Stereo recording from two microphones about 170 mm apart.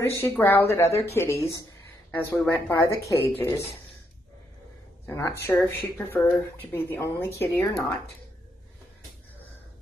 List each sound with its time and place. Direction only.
0.0 s speech: 15° left (ahead or behind)
5.0 s speech: 15° left (ahead or behind)